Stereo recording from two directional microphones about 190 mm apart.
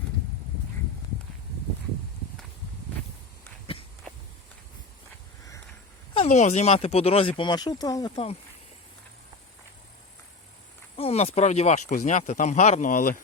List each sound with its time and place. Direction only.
6.1 s speech: 35° left (ahead or behind)
10.9 s speech: 30° left (ahead or behind)